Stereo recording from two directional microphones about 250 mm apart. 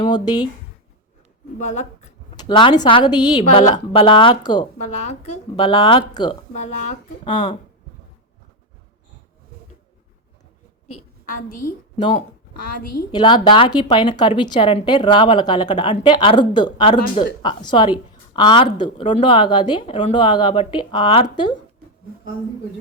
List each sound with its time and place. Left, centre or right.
0.0 s speech: centre
1.5 s a woman's voice: left
6.5 s a woman's voice: left
7.3 s a woman's voice: centre
11.3 s a woman's voice: left
12.8 s a woman's voice: left
13.1 s a woman's voice: centre